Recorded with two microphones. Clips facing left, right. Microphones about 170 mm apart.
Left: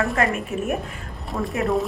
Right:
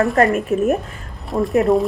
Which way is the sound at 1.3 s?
Centre (ahead or behind).